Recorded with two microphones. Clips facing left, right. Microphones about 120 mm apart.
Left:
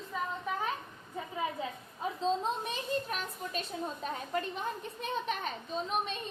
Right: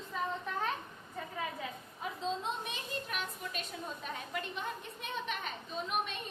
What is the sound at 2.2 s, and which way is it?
A child's voice, 35° left (ahead or behind).